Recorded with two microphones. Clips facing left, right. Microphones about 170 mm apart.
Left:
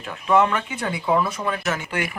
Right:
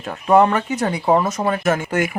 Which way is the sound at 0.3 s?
40° right (ahead or behind).